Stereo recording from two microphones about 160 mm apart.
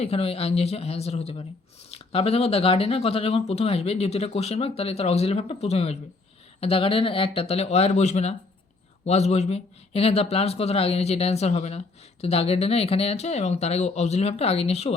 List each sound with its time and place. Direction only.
0.0 s speech: 40° left (ahead or behind)